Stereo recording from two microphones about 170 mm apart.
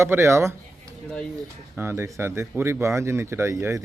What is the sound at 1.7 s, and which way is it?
A man's voice, 15° right (ahead or behind).